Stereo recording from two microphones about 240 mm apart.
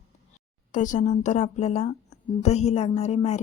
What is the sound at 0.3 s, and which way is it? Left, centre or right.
A woman's voice, left.